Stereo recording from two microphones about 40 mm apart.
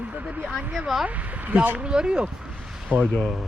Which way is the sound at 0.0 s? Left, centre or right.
Right.